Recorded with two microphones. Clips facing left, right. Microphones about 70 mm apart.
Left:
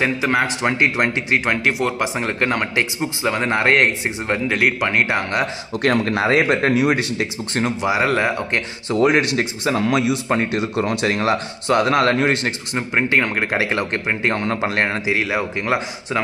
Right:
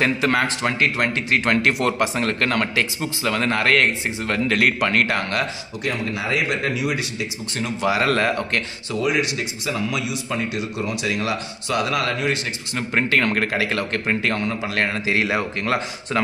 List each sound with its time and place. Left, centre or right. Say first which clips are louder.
0.0 s speech: left 1 dB; centre
0.7 s speech: left 3 dB; centre
2.1 s speech: left 1 dB; centre
4.6 s speech: even; centre
5.8 s speech: left 8 dB; left
7.8 s speech: right 1 dB; centre
8.9 s speech: left 6 dB; left
12.7 s speech: left 1 dB; centre
15.0 s a man's voice: left 1 dB; centre
15.6 s speech: left 2 dB; centre